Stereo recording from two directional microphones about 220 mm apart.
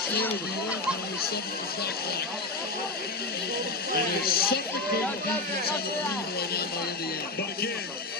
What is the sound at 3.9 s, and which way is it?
Speech, 45° left (ahead or behind).